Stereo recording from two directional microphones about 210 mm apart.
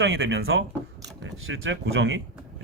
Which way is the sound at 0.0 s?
65° right (ahead or behind).